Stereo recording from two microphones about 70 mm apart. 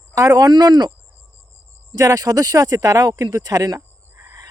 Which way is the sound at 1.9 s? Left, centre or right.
Right.